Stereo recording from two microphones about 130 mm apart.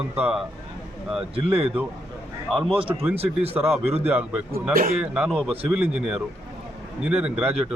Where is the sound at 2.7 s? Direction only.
45° right (ahead or behind).